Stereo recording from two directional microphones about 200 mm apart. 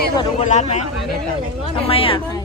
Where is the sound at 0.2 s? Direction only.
35° left (ahead or behind).